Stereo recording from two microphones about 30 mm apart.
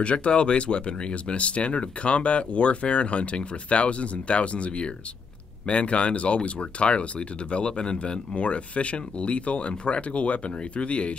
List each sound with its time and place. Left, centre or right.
0.0 s speech: left